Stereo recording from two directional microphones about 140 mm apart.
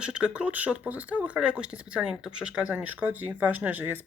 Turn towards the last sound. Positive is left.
turn(degrees=-15)  # may be behind; listen again after turning